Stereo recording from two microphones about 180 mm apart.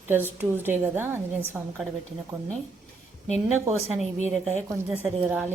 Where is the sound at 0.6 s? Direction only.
10° right (ahead or behind).